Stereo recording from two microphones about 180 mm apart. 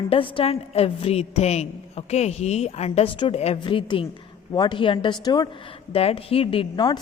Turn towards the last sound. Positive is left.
turn(degrees=25)  # may be behind; listen again after turning